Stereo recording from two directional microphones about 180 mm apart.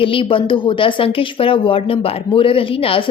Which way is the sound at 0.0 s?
30° left (ahead or behind).